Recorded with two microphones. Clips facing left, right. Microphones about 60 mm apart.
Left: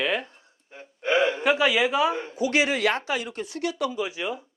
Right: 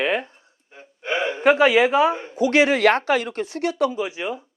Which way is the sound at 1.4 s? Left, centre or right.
Right.